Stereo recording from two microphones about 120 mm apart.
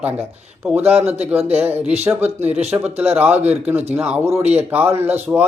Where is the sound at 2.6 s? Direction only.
15° right (ahead or behind).